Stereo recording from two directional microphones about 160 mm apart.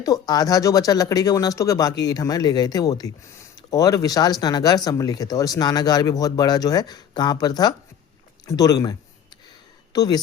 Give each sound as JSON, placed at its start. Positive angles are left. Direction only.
{"t": 0.0, "sound": "speech", "side_deg": 25}